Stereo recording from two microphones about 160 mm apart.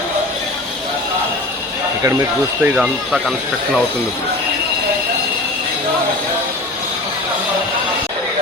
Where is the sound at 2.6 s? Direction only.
5° right (ahead or behind).